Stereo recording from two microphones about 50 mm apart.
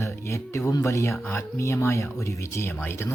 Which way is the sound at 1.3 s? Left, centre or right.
Left.